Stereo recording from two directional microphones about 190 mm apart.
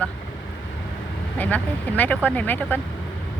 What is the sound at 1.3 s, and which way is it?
A woman's voice, 10° left (ahead or behind).